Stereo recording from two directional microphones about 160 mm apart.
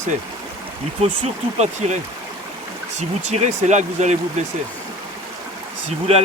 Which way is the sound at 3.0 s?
45° right (ahead or behind).